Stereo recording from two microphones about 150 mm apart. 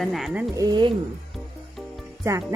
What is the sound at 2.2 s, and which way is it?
Speech, 20° right (ahead or behind).